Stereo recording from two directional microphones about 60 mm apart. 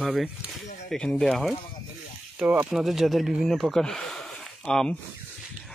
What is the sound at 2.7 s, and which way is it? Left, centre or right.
Speech, centre.